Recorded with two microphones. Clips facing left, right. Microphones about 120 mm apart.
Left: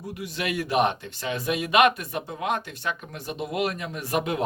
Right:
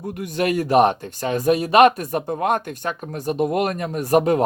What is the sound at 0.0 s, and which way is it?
Speech, 50° right (ahead or behind).